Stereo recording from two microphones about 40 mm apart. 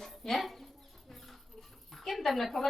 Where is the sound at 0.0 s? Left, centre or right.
Centre.